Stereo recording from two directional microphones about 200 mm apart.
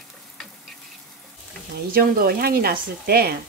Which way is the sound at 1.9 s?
50° right (ahead or behind).